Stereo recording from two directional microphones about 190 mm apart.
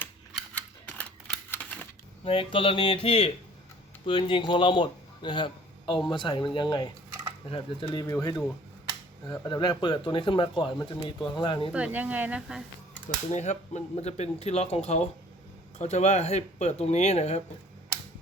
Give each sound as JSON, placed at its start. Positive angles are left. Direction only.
{"t": 0.3, "sound": "typewriter", "side_deg": 5}
{"t": 2.2, "sound": "a man's voice", "side_deg": 30}
{"t": 11.7, "sound": "speech", "side_deg": -5}
{"t": 13.3, "sound": "speech", "side_deg": 35}